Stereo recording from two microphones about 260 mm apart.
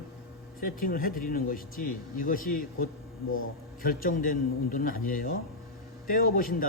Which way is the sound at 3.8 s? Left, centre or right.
Left.